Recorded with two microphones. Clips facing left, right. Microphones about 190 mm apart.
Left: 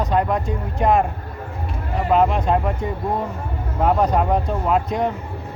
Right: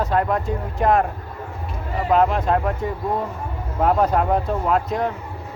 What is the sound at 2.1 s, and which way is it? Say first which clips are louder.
Speech: even; centre (ahead or behind).